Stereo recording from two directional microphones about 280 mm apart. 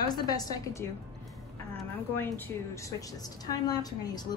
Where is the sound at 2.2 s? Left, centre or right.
Centre.